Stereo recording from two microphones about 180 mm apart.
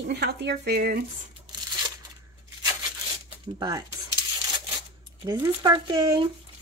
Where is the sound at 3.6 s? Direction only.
20° right (ahead or behind).